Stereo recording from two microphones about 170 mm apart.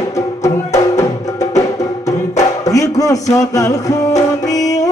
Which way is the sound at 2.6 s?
20° left (ahead or behind).